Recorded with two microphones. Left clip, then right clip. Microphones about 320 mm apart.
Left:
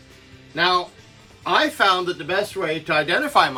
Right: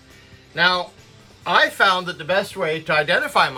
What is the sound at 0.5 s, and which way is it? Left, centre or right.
Speech, centre.